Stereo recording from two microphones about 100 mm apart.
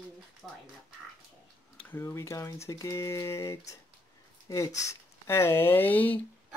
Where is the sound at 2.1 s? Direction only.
30° left (ahead or behind).